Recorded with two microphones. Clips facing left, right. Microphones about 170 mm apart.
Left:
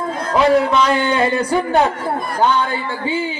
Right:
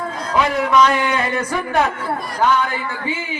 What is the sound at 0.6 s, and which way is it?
Speech, 30° left (ahead or behind).